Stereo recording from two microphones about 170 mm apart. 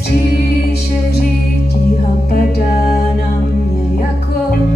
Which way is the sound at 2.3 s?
60° left (ahead or behind).